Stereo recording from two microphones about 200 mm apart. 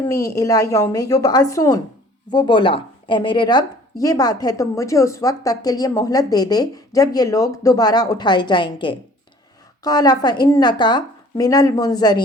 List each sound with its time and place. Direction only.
0.1 s a woman's voice: 15° left (ahead or behind)